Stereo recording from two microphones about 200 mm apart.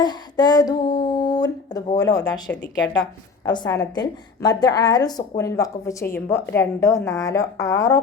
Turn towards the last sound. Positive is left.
turn(degrees=15)  # may be behind; listen again after turning